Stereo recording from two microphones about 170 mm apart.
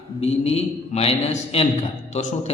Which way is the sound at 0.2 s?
40° left (ahead or behind).